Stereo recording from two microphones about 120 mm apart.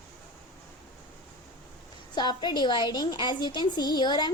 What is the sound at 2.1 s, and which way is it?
A woman's voice, 35° left (ahead or behind).